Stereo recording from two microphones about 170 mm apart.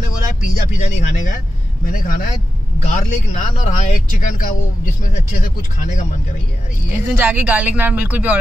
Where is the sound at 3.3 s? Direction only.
45° left (ahead or behind).